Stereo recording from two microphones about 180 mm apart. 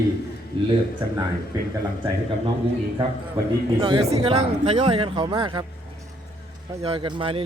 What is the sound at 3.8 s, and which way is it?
Speech, 25° right (ahead or behind).